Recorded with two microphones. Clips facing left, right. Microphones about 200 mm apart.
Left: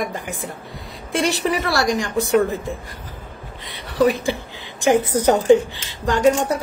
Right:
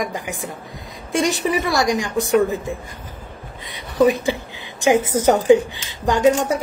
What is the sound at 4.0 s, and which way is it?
Speech, 20° right (ahead or behind).